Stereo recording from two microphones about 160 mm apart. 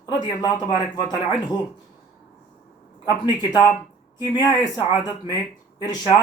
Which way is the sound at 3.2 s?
25° left (ahead or behind).